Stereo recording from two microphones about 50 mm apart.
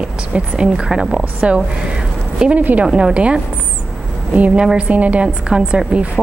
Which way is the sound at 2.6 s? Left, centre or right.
Right.